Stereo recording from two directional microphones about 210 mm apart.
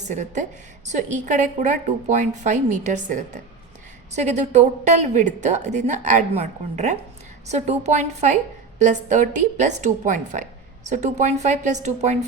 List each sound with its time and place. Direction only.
0.1 s a woman's voice: 35° right (ahead or behind)